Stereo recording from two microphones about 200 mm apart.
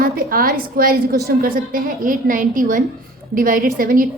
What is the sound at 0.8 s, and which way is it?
A woman's voice, 50° right (ahead or behind).